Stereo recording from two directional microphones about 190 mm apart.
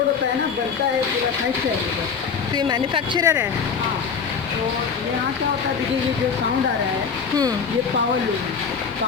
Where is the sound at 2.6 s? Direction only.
25° right (ahead or behind).